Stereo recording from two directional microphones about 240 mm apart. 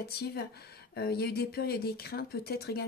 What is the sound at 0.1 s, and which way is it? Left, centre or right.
Speech, left.